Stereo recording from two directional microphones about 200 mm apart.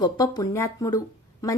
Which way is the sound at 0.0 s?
20° left (ahead or behind).